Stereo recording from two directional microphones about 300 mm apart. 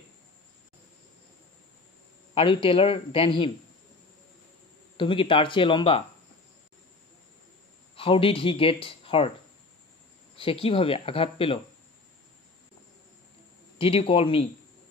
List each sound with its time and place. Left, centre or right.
2.3 s speech: centre
4.9 s speech: centre
7.9 s speech: centre
10.3 s speech: centre
13.7 s speech: centre